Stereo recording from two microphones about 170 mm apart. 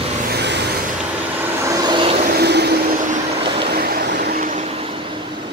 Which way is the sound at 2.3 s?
75° right (ahead or behind).